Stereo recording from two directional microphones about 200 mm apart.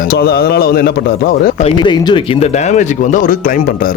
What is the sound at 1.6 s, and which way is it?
Speech, 25° left (ahead or behind).